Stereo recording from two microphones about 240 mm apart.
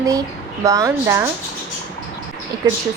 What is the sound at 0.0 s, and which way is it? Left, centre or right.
A woman's voice, centre.